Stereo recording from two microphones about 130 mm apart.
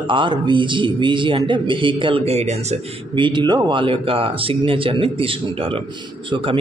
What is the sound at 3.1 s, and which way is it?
Speech, 35° right (ahead or behind).